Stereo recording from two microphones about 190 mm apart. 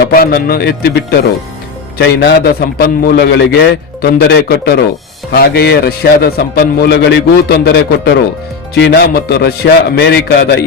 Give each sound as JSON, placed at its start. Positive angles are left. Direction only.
{"t": 0.0, "sound": "a man's voice", "side_deg": 55}
{"t": 2.0, "sound": "a man's voice", "side_deg": 60}